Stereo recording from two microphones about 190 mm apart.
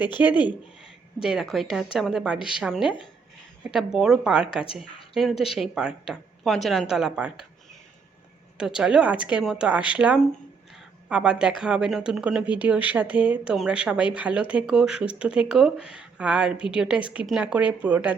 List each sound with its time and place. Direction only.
0.2 s speech: 10° right (ahead or behind)
8.5 s speech: 5° right (ahead or behind)